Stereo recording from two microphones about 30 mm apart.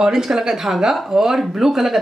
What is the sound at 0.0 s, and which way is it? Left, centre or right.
Speech, centre.